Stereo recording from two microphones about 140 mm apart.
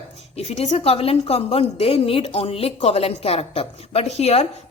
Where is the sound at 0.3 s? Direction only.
50° left (ahead or behind).